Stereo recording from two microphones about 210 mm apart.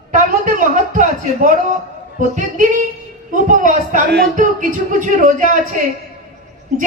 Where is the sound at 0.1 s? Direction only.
40° right (ahead or behind).